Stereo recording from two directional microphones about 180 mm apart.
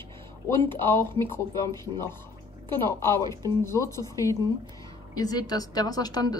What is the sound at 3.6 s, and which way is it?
A woman's voice, 15° left (ahead or behind).